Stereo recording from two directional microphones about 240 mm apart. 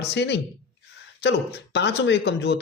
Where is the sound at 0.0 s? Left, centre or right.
Left.